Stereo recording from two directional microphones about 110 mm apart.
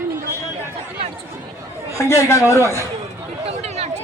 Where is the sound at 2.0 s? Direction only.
25° left (ahead or behind).